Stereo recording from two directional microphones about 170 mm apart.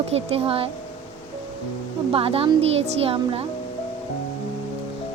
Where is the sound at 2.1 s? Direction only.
35° right (ahead or behind).